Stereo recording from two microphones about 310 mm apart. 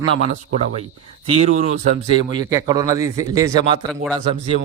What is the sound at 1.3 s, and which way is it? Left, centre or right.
A man's voice, right.